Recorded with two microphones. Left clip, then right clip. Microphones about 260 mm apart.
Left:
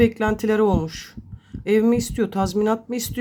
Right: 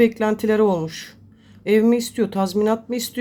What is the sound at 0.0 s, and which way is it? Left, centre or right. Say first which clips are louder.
Speech: right 2 dB; centre.